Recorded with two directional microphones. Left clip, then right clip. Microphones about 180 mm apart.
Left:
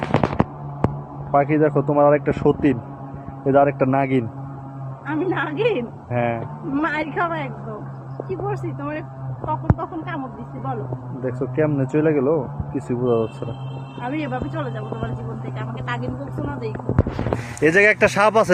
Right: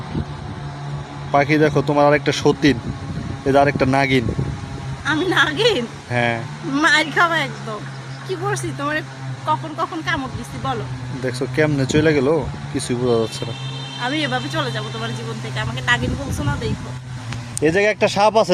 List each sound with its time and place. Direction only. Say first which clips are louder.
1.3 s speech: right 2 dB; 25° right (ahead or behind)
5.0 s speech: right 6 dB; 50° right (ahead or behind)
6.1 s speech: right 3 dB; 20° right (ahead or behind)
6.7 s speech: right 7 dB; 45° right (ahead or behind)
11.3 s speech: right 2 dB; 25° right (ahead or behind)
14.0 s speech: right 5 dB; 50° right (ahead or behind)
17.6 s speech: left 2 dB; 10° right (ahead or behind)